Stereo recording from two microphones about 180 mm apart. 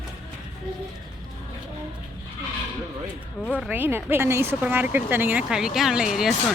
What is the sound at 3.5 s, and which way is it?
Speech, 10° right (ahead or behind).